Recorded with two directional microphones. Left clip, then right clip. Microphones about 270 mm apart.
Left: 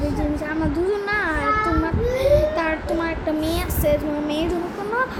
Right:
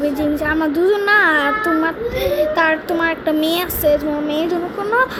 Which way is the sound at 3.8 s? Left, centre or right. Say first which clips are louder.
Right 4 dB; centre.